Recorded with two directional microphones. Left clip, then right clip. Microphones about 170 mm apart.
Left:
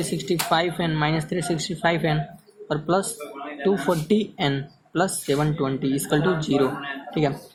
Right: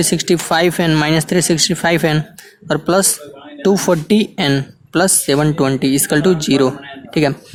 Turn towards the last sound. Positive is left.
turn(degrees=-55)  # may be behind; listen again after turning